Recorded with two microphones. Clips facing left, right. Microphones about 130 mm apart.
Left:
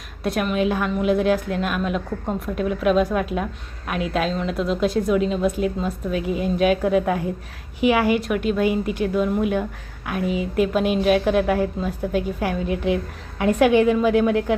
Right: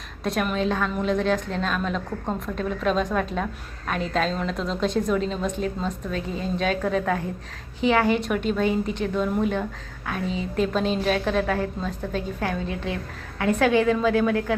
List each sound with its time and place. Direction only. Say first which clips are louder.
0.2 s a woman's voice: left 3 dB; 5° left (ahead or behind); by 14.5 s 20° left (ahead or behind)